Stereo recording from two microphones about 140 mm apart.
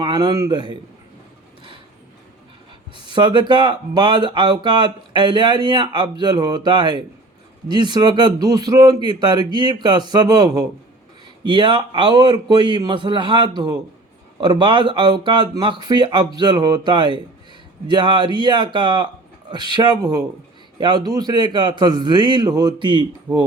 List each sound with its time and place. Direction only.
0.0 s speech: 30° right (ahead or behind)
2.9 s speech: 35° right (ahead or behind)